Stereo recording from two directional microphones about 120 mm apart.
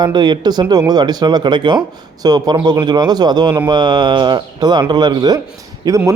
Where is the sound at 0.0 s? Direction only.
35° right (ahead or behind).